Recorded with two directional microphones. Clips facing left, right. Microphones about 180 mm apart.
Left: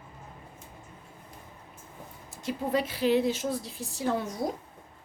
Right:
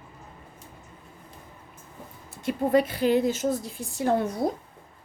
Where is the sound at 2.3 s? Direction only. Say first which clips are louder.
Right 6 dB; 55° right (ahead or behind).